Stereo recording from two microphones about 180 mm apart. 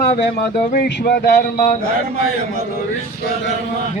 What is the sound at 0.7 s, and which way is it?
A man's voice, 60° left (ahead or behind).